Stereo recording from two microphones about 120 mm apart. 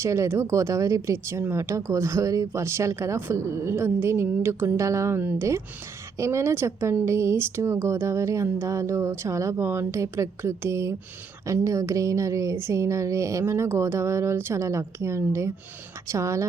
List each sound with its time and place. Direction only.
0.0 s speech: 25° right (ahead or behind)